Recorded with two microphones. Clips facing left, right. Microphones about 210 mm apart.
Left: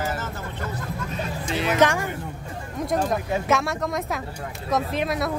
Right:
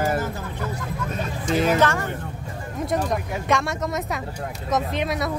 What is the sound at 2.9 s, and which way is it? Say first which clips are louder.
Speech: left 2 dB; 5° left (ahead or behind).